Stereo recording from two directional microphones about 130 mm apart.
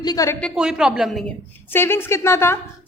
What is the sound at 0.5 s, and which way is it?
Speech, 5° right (ahead or behind).